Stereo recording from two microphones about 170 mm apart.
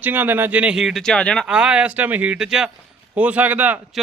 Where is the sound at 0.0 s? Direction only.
10° right (ahead or behind); by 1.5 s 5° left (ahead or behind).